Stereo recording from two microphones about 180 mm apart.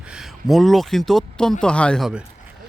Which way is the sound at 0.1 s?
Centre (ahead or behind).